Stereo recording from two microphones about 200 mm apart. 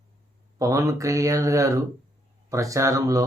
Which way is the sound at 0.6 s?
15° right (ahead or behind).